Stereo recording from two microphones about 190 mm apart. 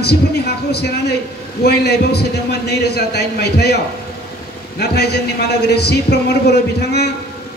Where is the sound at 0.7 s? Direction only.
60° left (ahead or behind).